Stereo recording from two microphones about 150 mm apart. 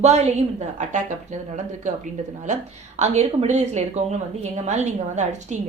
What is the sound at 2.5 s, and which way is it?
A woman's voice, 55° right (ahead or behind).